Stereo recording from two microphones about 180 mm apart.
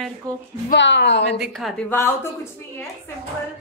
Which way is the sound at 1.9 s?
15° left (ahead or behind).